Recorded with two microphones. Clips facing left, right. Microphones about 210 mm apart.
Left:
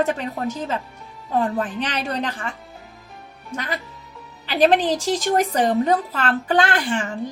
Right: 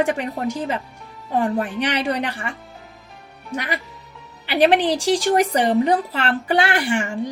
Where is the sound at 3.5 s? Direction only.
10° right (ahead or behind).